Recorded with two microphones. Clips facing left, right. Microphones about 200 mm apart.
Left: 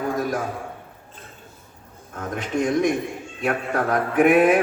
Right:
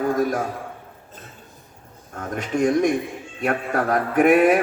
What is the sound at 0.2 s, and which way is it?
Speech, 45° right (ahead or behind).